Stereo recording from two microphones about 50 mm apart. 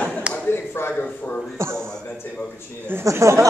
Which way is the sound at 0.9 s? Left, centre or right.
Left.